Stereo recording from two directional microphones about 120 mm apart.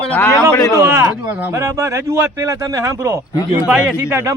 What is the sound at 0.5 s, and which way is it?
Speech, 25° left (ahead or behind).